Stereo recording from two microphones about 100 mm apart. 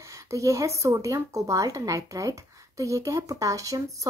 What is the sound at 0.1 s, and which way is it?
Speech, 30° right (ahead or behind).